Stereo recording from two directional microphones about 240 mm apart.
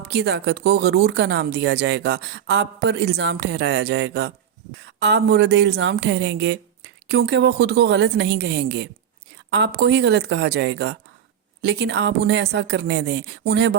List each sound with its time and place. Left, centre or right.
0.0 s speech: right